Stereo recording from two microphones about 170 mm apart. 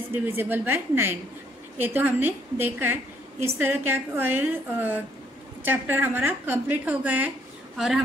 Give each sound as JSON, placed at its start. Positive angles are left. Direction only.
{"t": 0.1, "sound": "a woman's voice", "side_deg": -10}